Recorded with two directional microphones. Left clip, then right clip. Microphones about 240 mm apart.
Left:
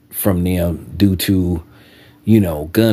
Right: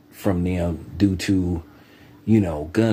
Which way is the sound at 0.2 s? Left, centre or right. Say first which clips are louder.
Left 5 dB; left.